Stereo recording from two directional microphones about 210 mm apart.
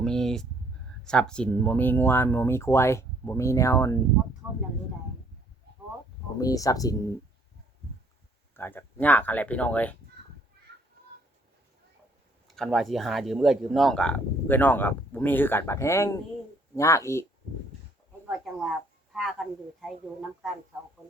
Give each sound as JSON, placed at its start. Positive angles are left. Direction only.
{"t": 0.0, "sound": "a sound", "side_deg": 0}
{"t": 1.0, "sound": "speech", "side_deg": 5}
{"t": 6.4, "sound": "speech", "side_deg": 15}
{"t": 8.5, "sound": "speech", "side_deg": 10}
{"t": 12.5, "sound": "speech", "side_deg": 0}
{"t": 19.1, "sound": "speech", "side_deg": 0}